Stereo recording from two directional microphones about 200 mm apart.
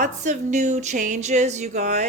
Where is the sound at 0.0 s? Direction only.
35° right (ahead or behind).